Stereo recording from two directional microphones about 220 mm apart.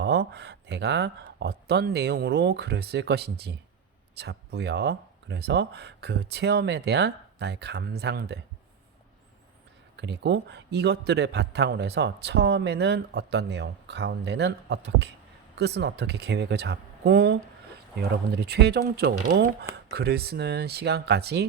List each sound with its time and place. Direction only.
0.0 s a man's voice: 50° right (ahead or behind)
10.0 s a man's voice: 50° right (ahead or behind)